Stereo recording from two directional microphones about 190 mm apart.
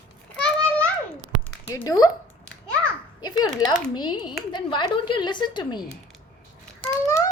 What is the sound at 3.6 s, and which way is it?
Speech, 20° left (ahead or behind).